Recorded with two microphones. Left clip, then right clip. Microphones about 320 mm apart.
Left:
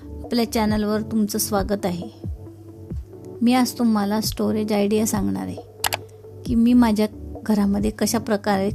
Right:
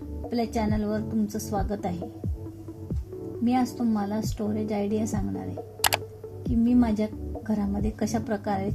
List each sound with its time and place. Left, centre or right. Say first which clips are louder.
0.3 s a woman's voice: left 6 dB; left
3.4 s a woman's voice: left 6 dB; left
5.8 s computer keyboard: even; centre
6.7 s a woman's voice: left 7 dB; left